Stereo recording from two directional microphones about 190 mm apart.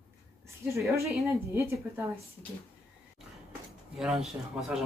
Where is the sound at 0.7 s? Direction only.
15° right (ahead or behind).